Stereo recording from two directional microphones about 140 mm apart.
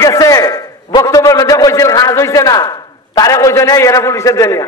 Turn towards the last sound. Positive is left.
turn(degrees=20)  # may be behind; listen again after turning